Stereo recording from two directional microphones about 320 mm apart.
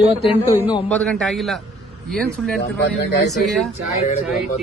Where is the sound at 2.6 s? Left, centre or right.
Left.